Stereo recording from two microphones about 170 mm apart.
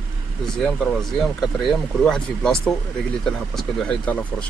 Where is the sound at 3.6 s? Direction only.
5° left (ahead or behind).